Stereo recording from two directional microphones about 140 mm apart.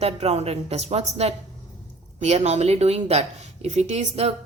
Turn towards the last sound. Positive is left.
turn(degrees=-50)  # may be behind; listen again after turning